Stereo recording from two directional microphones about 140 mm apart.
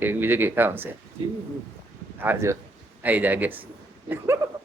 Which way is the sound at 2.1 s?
15° right (ahead or behind).